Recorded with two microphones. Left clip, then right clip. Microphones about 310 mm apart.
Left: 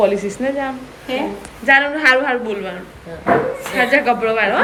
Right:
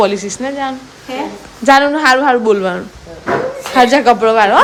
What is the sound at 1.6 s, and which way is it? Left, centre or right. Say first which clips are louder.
Speech: right 4 dB; right.